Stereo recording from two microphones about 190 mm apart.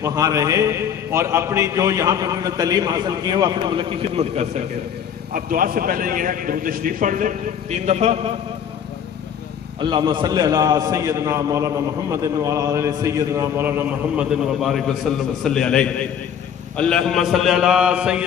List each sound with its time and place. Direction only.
0.0 s a man's voice: 15° right (ahead or behind)
5.3 s a man's voice: 50° right (ahead or behind)
9.8 s a man's voice: 25° right (ahead or behind); by 18.2 s 5° right (ahead or behind)